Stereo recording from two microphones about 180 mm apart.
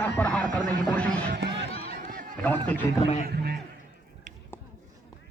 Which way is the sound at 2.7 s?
10° left (ahead or behind).